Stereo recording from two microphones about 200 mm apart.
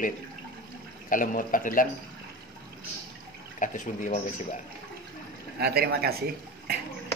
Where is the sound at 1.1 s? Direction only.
40° left (ahead or behind).